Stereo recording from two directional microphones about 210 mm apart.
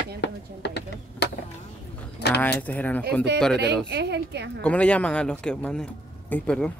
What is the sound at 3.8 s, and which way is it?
Speech, 55° right (ahead or behind).